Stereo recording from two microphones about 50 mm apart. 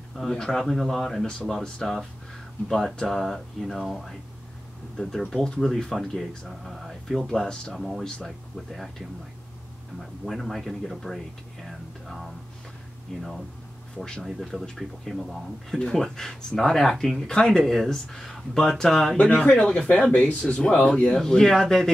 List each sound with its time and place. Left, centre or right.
0.1 s speech: centre
3.6 s speech: centre
7.7 s speech: centre
10.2 s speech: centre
11.6 s music: centre
13.1 s speech: centre
20.1 s speech: left; by 21.9 s centre